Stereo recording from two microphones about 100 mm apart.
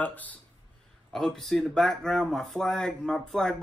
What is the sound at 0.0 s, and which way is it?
Speech, 15° left (ahead or behind).